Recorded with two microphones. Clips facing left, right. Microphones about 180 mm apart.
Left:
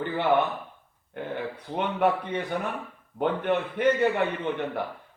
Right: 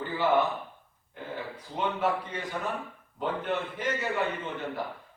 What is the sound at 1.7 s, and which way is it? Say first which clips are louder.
Speech: left 4 dB; 60° left (ahead or behind).